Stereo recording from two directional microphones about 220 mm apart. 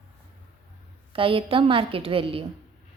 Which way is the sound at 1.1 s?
25° right (ahead or behind).